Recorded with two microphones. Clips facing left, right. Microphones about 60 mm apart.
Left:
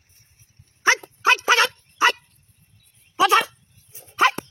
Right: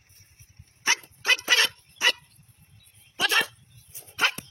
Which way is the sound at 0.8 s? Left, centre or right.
Left.